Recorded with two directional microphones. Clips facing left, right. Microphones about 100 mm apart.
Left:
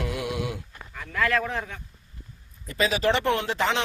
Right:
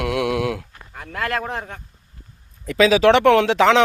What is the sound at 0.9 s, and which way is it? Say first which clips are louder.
Speech: even; 45° right (ahead or behind).